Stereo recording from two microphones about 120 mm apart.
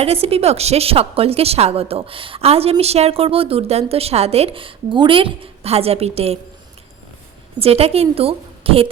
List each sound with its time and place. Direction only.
0.0 s a woman's voice: 55° right (ahead or behind)
7.6 s a woman's voice: 55° right (ahead or behind)